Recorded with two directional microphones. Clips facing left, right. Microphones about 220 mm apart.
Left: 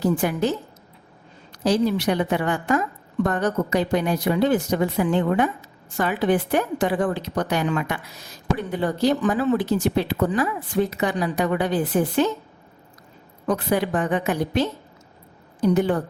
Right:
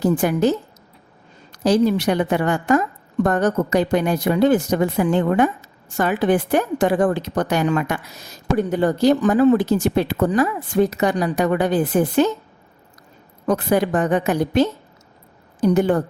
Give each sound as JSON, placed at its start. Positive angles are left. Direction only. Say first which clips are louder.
{"t": 0.0, "sound": "a woman's voice", "louder": "right 4 dB", "side_deg": -45}
{"t": 1.5, "sound": "a woman's voice", "louder": "right 4 dB", "side_deg": -45}
{"t": 13.5, "sound": "a woman's voice", "louder": "right 4 dB", "side_deg": -45}
{"t": 15.6, "sound": "a woman's voice", "louder": "right 3 dB", "side_deg": -45}